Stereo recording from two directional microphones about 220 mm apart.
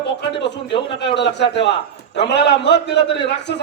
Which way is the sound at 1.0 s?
50° left (ahead or behind).